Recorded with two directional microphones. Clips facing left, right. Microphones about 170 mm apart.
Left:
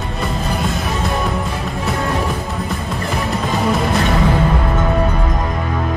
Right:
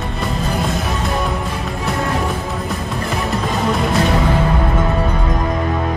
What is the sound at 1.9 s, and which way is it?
Music, centre (ahead or behind).